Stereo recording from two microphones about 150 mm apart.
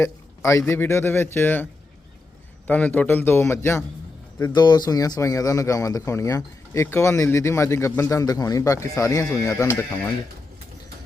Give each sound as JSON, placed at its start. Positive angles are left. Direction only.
{"t": 0.0, "sound": "a man's voice", "side_deg": 20}
{"t": 2.6, "sound": "a man's voice", "side_deg": 10}
{"t": 4.4, "sound": "speech", "side_deg": 30}